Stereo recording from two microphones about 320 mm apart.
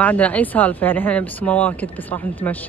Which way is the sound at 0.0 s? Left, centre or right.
Centre.